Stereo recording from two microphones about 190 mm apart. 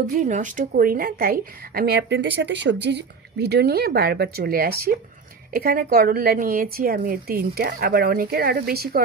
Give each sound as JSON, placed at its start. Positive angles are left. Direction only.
{"t": 0.0, "sound": "a woman's voice", "side_deg": -45}